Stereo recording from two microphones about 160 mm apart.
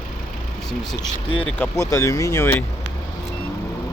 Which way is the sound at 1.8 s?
20° left (ahead or behind).